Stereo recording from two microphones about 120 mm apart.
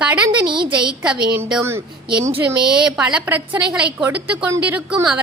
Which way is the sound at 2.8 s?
10° right (ahead or behind).